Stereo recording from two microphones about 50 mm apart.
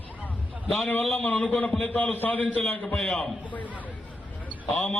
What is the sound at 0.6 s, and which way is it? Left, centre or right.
Speech, centre.